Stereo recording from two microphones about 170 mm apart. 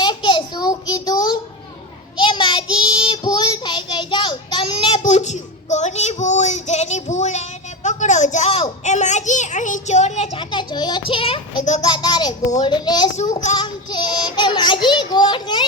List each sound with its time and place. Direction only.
0.0 s a sound: 25° left (ahead or behind)
2.1 s child singing: 25° left (ahead or behind)
5.0 s child singing: 45° left (ahead or behind)
7.9 s a sound: 45° left (ahead or behind)
8.8 s a child's voice: 45° left (ahead or behind)
10.5 s a child's voice: 25° left (ahead or behind)
11.6 s a child's voice: 45° left (ahead or behind)
11.9 s a sound: 25° left (ahead or behind)
12.6 s a child's voice: 25° left (ahead or behind)
13.6 s child singing: 25° left (ahead or behind)